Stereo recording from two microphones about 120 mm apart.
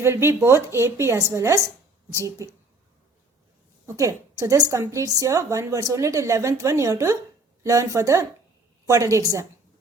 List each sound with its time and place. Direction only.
0.0 s a woman's voice: 20° right (ahead or behind)
3.8 s a woman's voice: 25° right (ahead or behind)